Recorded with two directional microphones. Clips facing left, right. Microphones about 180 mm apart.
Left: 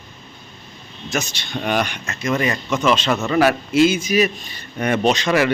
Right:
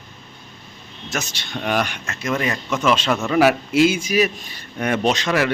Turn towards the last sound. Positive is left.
turn(degrees=0)  # may be behind; listen again after turning